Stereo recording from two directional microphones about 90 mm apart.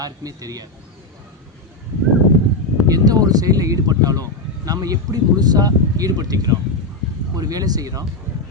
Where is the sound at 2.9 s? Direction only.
45° right (ahead or behind).